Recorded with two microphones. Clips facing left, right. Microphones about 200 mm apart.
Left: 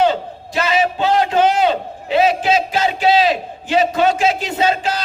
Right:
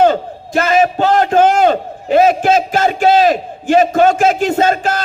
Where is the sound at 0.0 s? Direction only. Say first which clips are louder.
Right 4 dB; 50° right (ahead or behind).